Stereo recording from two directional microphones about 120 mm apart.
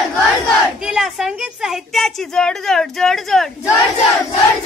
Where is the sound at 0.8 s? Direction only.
5° right (ahead or behind).